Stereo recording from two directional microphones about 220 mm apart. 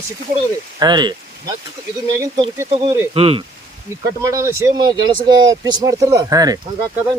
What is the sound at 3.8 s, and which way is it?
Speech, 15° right (ahead or behind).